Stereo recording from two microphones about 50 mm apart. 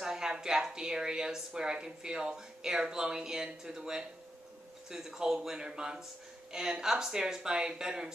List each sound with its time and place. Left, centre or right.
0.0 s a woman's voice: centre